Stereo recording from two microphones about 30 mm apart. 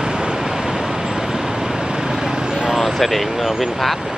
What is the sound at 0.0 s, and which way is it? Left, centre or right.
Vehicle, right.